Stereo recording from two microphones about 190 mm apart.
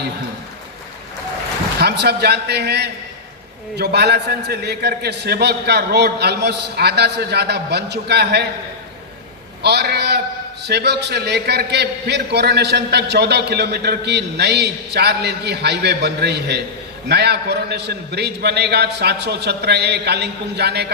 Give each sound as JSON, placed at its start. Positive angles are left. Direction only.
{"t": 1.8, "sound": "a man's voice", "side_deg": -60}
{"t": 9.6, "sound": "a man's voice", "side_deg": -60}